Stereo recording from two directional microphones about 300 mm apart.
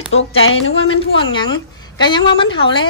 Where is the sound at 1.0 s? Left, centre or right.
Centre.